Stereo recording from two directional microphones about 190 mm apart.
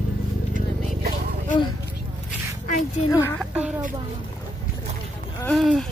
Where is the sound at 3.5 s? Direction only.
5° right (ahead or behind).